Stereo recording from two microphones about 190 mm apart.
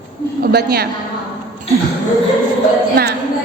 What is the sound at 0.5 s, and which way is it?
Speech, 55° right (ahead or behind).